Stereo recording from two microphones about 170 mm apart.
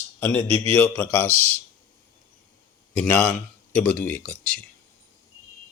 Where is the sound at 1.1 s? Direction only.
10° left (ahead or behind).